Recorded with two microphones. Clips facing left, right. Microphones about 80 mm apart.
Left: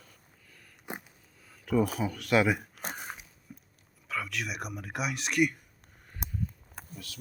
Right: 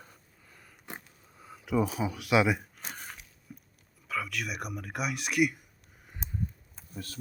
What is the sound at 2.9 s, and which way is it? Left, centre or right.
Biting, centre.